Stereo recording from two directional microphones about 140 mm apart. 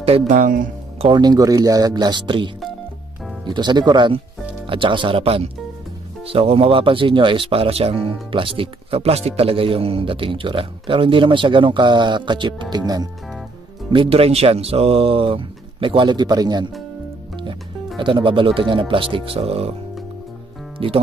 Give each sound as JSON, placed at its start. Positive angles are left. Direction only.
{"t": 0.3, "sound": "speech", "side_deg": -75}
{"t": 0.9, "sound": "speech", "side_deg": -35}
{"t": 3.5, "sound": "speech", "side_deg": -30}
{"t": 13.9, "sound": "speech", "side_deg": -45}
{"t": 17.9, "sound": "speech", "side_deg": -35}
{"t": 20.8, "sound": "speech", "side_deg": -40}